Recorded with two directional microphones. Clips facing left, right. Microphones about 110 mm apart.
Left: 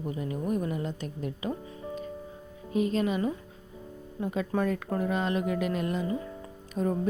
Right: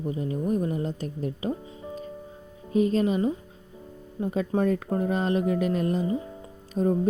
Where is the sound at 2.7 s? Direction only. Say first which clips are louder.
Right 4 dB; 35° right (ahead or behind).